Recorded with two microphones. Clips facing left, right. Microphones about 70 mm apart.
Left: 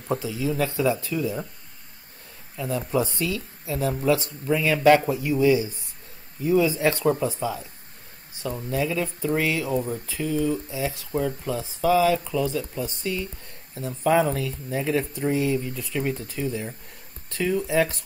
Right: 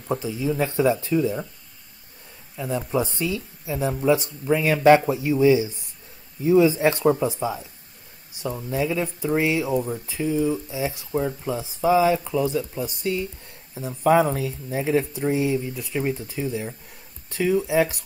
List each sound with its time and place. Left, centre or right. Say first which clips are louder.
0.2 s speech: right 1 dB; right
2.5 s speech: even; right
9.8 s speech: right 1 dB; centre
10.0 s speech: right 2 dB; centre